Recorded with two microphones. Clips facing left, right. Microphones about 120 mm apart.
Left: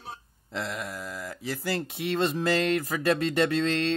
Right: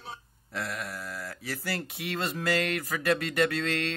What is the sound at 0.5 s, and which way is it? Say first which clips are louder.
Speech: left 2 dB; 20° left (ahead or behind).